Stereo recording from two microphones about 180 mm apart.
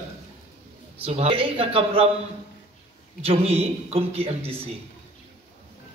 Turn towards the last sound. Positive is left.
turn(degrees=-35)  # may be behind; listen again after turning